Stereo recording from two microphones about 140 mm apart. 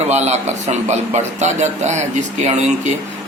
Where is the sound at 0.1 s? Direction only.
50° right (ahead or behind).